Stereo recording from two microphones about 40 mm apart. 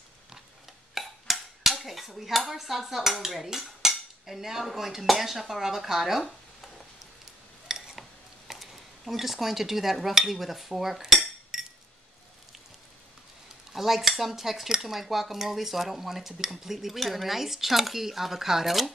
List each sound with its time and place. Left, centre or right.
0.9 s dishes: centre
3.9 s cutlery: centre
7.6 s a sound: centre
8.5 s dishes: centre
11.5 s chink: centre
13.7 s dishes: centre